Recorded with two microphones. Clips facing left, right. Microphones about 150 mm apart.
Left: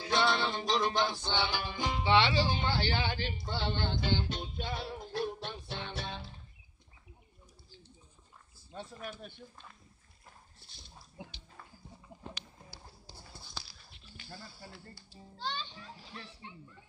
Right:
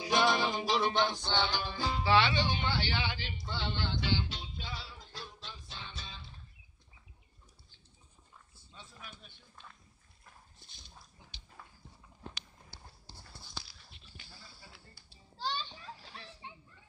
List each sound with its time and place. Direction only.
0.0 s music: 15° right (ahead or behind); by 6.3 s 65° left (ahead or behind)
8.7 s speech: 60° left (ahead or behind)
11.2 s dog: 80° left
14.3 s a sound: 50° left (ahead or behind)